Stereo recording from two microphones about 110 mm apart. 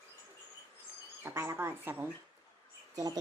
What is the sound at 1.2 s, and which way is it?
Speech, 25° right (ahead or behind).